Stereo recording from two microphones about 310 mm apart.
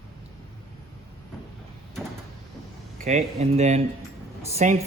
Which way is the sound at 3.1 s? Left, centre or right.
Right.